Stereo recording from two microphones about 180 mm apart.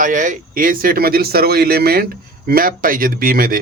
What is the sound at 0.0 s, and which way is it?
A man's voice, 45° right (ahead or behind).